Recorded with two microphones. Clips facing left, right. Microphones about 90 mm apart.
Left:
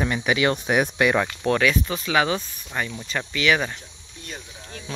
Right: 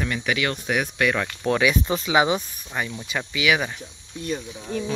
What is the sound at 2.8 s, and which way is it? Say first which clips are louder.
Speech: even; 5° right (ahead or behind).